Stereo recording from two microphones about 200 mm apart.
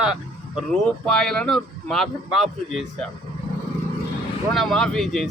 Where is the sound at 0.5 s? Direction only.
5° left (ahead or behind).